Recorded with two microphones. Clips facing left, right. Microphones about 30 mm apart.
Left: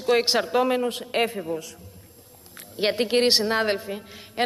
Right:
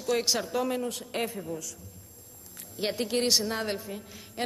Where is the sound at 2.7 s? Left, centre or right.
Left.